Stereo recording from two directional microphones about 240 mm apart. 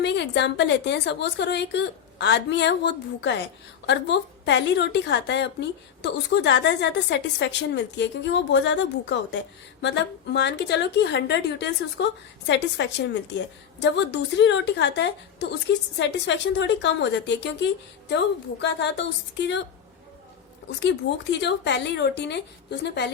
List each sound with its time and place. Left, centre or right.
0.0 s a woman's voice: left
21.4 s a woman's voice: left